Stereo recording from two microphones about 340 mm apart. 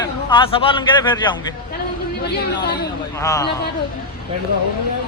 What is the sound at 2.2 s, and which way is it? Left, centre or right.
Speech, left.